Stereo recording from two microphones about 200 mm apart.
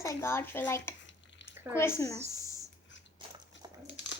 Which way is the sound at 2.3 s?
15° left (ahead or behind).